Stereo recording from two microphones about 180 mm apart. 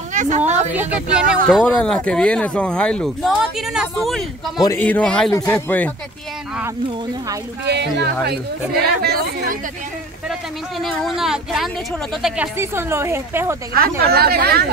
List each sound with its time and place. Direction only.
0.1 s a sound: 45° right (ahead or behind)
0.7 s a woman's voice: 5° right (ahead or behind)
4.6 s a man's voice: 15° left (ahead or behind)
7.6 s speech: 65° right (ahead or behind)
10.8 s speech: centre (ahead or behind)
12.5 s a woman's voice: 15° right (ahead or behind)
13.7 s speech: 60° right (ahead or behind)